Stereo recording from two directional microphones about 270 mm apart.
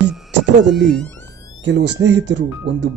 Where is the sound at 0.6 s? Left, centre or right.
Centre.